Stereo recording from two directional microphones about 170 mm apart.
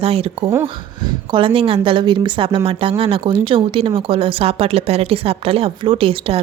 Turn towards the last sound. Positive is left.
turn(degrees=-30)  # may be behind; listen again after turning